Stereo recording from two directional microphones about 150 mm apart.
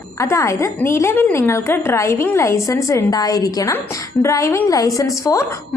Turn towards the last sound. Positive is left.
turn(degrees=20)  # may be behind; listen again after turning